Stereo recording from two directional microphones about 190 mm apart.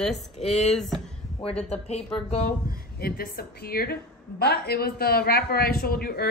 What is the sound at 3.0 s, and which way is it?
A man's voice, 55° left (ahead or behind).